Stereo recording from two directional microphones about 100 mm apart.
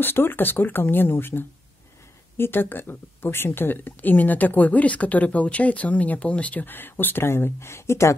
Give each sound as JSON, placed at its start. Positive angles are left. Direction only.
{"t": 0.0, "sound": "speech", "side_deg": 20}